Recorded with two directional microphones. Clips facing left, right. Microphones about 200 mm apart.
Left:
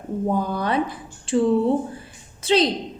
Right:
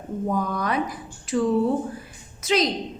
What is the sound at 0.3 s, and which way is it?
A woman's voice, 30° left (ahead or behind).